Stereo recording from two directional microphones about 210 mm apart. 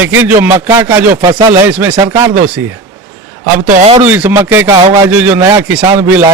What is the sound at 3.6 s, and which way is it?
Speech, 30° right (ahead or behind).